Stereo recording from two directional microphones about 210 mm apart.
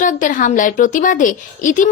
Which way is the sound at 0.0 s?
35° left (ahead or behind).